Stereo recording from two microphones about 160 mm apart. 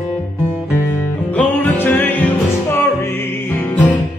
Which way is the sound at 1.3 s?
10° left (ahead or behind).